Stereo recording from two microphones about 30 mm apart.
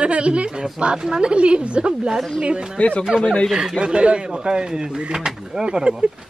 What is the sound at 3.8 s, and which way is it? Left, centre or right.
Speech, right.